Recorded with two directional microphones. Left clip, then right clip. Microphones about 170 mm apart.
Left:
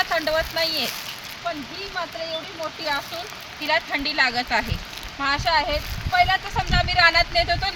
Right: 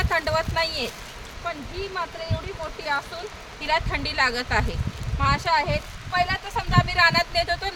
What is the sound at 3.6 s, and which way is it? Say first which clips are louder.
Speech: left 2 dB; 65° right (ahead or behind).